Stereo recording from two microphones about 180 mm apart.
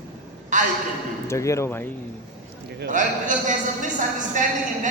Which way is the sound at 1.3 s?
15° left (ahead or behind).